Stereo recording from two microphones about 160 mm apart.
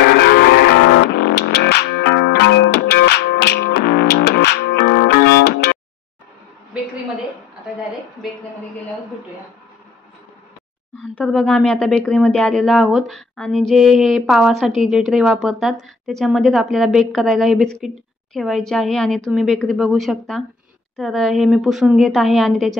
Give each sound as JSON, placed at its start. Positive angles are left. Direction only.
{"t": 0.0, "sound": "music", "side_deg": 75}
{"t": 11.0, "sound": "speech", "side_deg": 5}